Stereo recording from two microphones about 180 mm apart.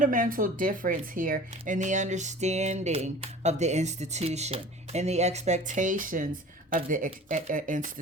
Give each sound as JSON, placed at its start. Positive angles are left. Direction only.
{"t": 0.0, "sound": "speech", "side_deg": -50}